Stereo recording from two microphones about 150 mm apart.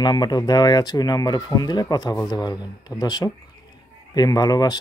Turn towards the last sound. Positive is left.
turn(degrees=25)  # may be behind; listen again after turning